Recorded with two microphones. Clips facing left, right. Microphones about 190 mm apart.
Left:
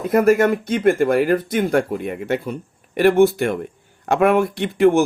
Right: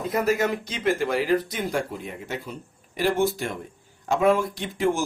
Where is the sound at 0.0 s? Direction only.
55° left (ahead or behind).